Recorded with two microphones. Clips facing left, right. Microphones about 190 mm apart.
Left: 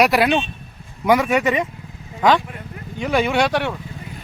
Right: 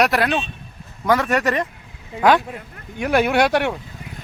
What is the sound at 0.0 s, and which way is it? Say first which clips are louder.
Speech: left 2 dB; 5° left (ahead or behind).